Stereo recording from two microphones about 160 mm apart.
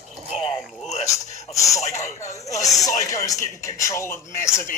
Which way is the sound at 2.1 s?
20° left (ahead or behind).